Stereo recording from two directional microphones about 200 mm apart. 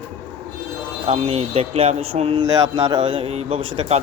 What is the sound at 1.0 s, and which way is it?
Speech, 30° right (ahead or behind).